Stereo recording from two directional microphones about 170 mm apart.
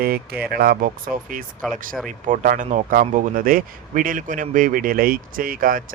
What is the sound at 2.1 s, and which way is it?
Speech, 50° right (ahead or behind).